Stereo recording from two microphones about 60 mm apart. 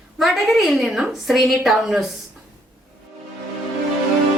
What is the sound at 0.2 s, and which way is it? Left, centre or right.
A woman's voice, centre.